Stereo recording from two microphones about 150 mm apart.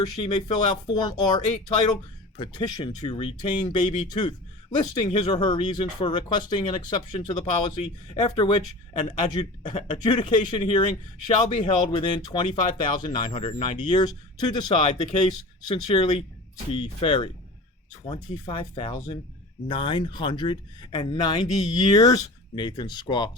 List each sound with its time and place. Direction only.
0.0 s speech: 30° left (ahead or behind)